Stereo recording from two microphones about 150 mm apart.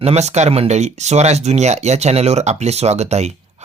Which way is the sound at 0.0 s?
45° right (ahead or behind).